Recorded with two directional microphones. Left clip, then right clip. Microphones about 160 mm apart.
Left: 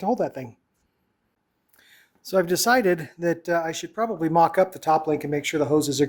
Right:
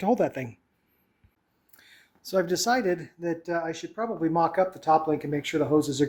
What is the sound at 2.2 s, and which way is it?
Speech, 35° left (ahead or behind).